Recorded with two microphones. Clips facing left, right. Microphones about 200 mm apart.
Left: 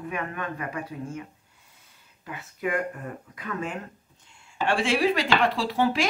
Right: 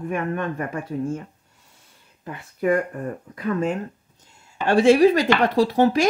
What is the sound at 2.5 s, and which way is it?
A woman's voice, 40° right (ahead or behind).